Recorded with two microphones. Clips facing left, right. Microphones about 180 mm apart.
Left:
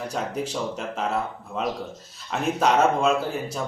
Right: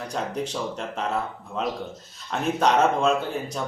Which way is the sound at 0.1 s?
5° left (ahead or behind).